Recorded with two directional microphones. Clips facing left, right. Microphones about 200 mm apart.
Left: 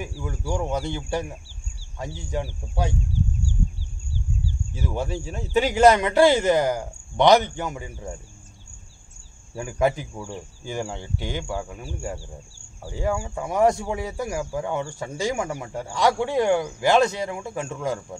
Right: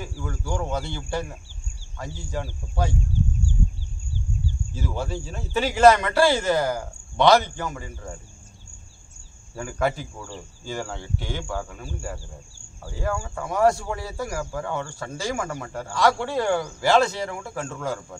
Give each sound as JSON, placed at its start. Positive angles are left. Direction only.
{"t": 0.0, "sound": "speech", "side_deg": 15}
{"t": 4.7, "sound": "speech", "side_deg": 15}
{"t": 9.6, "sound": "speech", "side_deg": 15}